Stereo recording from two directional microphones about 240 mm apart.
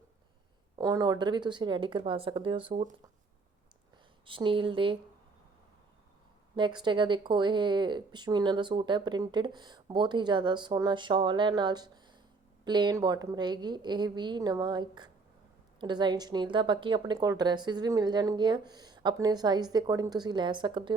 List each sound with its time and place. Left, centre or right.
0.8 s speech: centre
4.3 s speech: right
6.6 s speech: centre